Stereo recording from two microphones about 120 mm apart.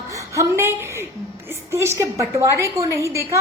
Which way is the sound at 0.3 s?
20° right (ahead or behind).